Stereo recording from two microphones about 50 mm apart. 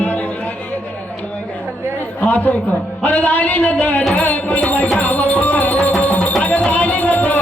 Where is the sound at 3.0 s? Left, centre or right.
Left.